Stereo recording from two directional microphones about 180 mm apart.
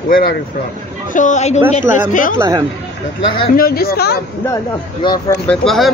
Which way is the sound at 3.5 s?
55° left (ahead or behind).